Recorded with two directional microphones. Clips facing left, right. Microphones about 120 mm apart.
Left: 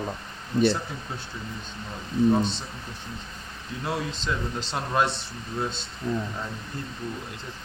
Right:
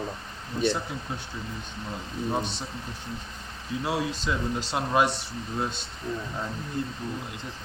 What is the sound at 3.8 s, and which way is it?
Speech, 10° right (ahead or behind).